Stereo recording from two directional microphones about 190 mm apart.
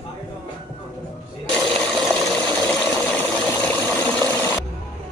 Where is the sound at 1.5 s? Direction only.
5° left (ahead or behind).